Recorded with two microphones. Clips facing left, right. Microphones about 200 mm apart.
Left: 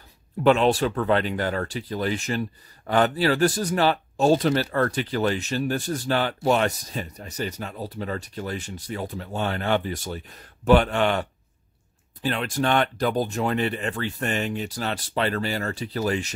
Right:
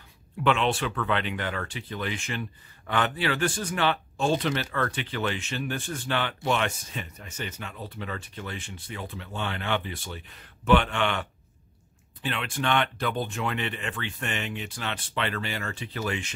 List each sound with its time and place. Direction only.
0.4 s speech: 40° left (ahead or behind)